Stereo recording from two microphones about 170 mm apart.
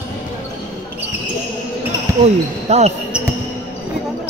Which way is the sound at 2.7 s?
40° right (ahead or behind).